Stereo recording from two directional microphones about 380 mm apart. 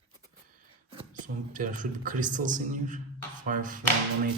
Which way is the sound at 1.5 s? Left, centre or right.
Centre.